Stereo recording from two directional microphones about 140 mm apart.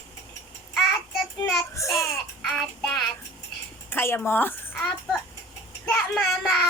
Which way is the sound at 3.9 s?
15° left (ahead or behind).